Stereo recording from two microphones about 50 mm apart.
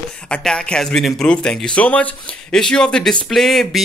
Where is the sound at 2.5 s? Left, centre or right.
Centre.